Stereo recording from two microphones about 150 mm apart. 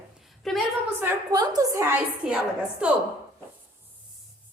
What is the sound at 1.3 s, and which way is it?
Speech, 25° right (ahead or behind).